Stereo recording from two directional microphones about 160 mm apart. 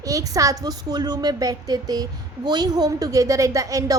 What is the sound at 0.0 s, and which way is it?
Speech, 20° right (ahead or behind).